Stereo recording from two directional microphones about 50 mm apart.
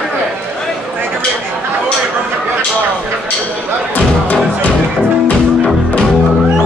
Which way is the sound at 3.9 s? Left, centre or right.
Left.